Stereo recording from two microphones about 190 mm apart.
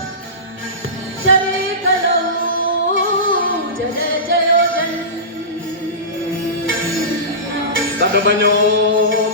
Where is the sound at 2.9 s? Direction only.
90° right.